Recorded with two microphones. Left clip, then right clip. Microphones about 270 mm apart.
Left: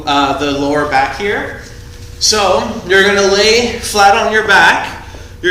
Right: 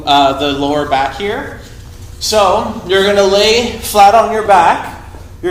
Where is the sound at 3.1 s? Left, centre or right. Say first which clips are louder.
Even; centre.